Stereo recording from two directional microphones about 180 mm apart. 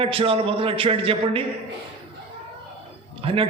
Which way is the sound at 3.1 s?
30° right (ahead or behind).